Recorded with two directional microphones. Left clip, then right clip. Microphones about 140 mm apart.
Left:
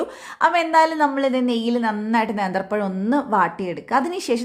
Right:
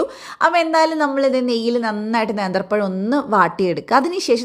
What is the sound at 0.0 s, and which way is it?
A woman's voice, 20° right (ahead or behind).